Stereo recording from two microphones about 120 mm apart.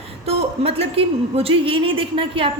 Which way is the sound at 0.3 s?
55° right (ahead or behind).